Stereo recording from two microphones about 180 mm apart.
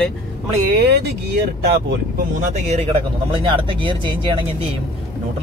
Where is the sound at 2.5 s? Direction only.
35° right (ahead or behind).